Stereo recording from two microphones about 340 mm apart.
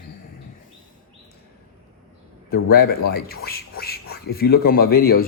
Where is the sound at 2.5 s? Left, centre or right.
Left.